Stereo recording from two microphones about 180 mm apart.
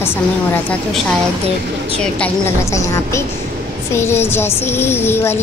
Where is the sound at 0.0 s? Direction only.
10° left (ahead or behind).